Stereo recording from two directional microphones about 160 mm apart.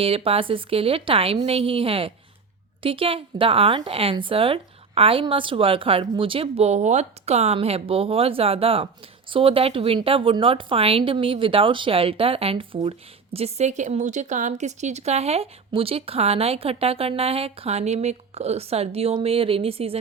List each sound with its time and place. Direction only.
0.0 s speech: 35° right (ahead or behind)